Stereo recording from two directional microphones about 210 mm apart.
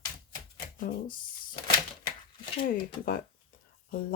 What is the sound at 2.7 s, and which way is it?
Speech, 40° left (ahead or behind).